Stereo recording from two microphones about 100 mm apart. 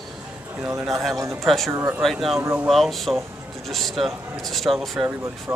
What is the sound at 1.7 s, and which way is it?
Speech, 20° right (ahead or behind).